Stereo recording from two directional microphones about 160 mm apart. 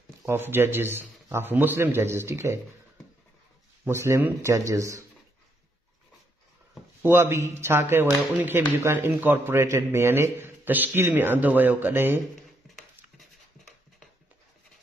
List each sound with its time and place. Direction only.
0.2 s a man's voice: 15° right (ahead or behind)
3.8 s a man's voice: 15° right (ahead or behind)
7.0 s a man's voice: 15° right (ahead or behind)
12.6 s dog: centre (ahead or behind)